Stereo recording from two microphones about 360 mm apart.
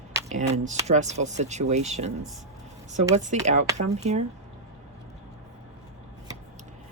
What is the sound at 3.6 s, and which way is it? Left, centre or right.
Speech, centre.